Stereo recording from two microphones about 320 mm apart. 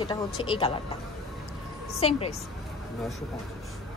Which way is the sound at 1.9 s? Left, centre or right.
Centre.